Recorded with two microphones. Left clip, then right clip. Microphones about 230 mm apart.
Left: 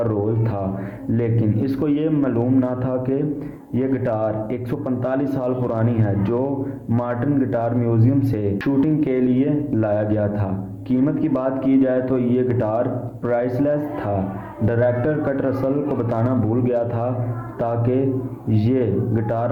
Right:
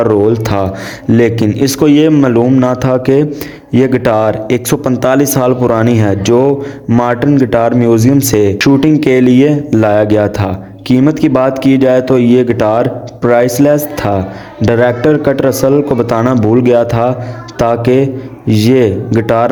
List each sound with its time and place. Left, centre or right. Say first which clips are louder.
0.0 s speech: right 13 dB; right